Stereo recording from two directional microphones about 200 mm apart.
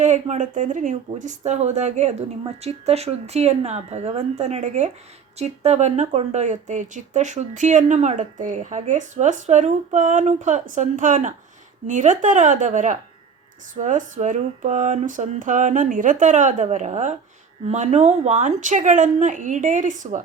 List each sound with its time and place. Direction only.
0.0 s speech: 35° right (ahead or behind)